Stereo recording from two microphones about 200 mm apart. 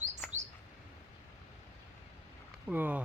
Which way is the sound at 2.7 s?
10° right (ahead or behind).